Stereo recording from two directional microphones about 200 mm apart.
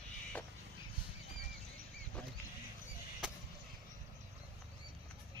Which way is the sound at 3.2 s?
5° right (ahead or behind).